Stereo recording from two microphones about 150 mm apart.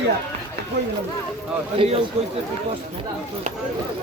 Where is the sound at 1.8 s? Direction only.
40° right (ahead or behind).